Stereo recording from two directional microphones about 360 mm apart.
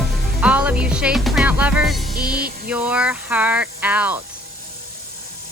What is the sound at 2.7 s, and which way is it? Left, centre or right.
Speech, centre.